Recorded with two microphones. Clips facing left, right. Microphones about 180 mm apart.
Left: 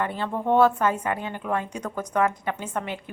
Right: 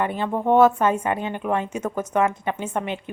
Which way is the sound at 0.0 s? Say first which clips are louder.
Right 4 dB; 15° right (ahead or behind).